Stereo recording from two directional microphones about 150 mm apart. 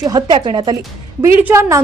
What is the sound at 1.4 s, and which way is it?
Speech, 15° right (ahead or behind).